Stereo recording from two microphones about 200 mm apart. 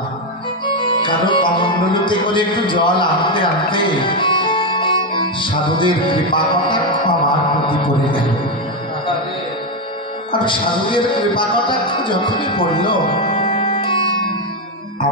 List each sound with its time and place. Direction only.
0.7 s speech: 25° left (ahead or behind)
10.3 s a man's voice: 25° left (ahead or behind)